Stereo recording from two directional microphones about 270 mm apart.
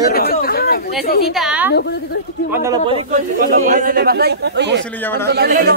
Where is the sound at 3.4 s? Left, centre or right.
Right.